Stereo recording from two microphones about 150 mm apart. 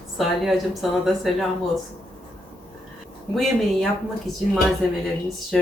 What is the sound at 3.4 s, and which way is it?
Speech, centre (ahead or behind).